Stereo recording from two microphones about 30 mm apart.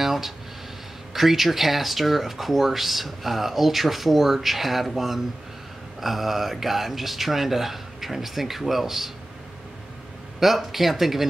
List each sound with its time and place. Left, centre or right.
0.0 s a sound: centre
1.1 s speech: centre
10.4 s speech: centre